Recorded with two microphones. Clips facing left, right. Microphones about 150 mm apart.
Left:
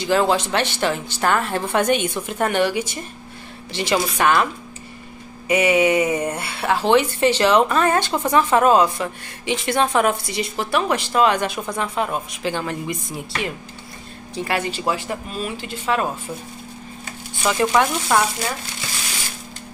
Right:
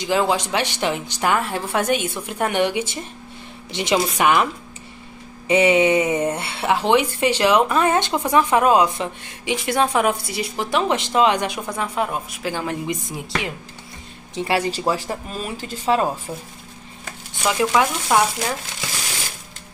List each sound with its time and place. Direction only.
0.0 s speech: 15° right (ahead or behind)
5.5 s speech: 25° right (ahead or behind); by 10.5 s 10° right (ahead or behind)
10.6 s speech: 20° right (ahead or behind)
14.3 s speech: 25° right (ahead or behind)
17.5 s speech: 5° right (ahead or behind)